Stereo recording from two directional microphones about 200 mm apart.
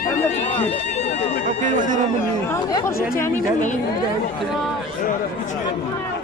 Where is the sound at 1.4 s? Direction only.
40° right (ahead or behind).